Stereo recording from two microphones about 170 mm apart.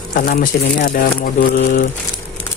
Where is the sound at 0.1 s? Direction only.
55° left (ahead or behind).